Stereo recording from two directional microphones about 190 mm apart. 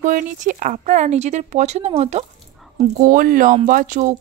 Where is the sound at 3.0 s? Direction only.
45° right (ahead or behind).